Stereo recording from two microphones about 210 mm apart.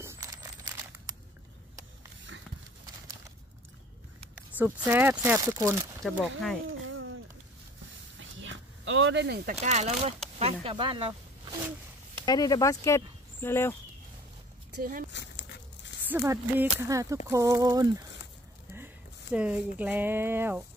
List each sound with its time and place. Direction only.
0.0 s crumpling: 15° right (ahead or behind)
4.4 s speech: 10° right (ahead or behind)
6.9 s a sound: 70° right (ahead or behind)
8.2 s a sound: 65° right (ahead or behind)
9.6 s speech: 30° right (ahead or behind)
12.3 s speech: 15° left (ahead or behind)
14.8 s speech: 40° right (ahead or behind)
16.1 s speech: 10° right (ahead or behind)
19.3 s speech: 5° right (ahead or behind)